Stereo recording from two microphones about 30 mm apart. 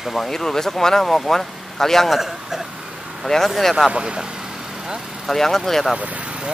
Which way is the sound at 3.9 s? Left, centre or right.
Right.